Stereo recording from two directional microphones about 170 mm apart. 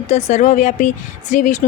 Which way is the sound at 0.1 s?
45° left (ahead or behind).